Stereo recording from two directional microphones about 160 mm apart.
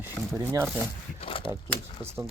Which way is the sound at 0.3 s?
15° right (ahead or behind).